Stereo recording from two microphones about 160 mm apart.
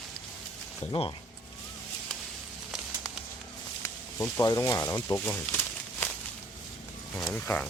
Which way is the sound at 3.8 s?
15° left (ahead or behind).